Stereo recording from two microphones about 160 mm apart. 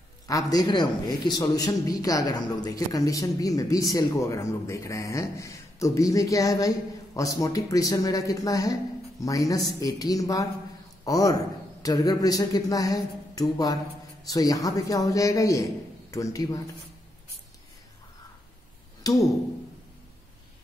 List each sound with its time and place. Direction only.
0.3 s a man's voice: 20° left (ahead or behind)
19.1 s a man's voice: 25° left (ahead or behind)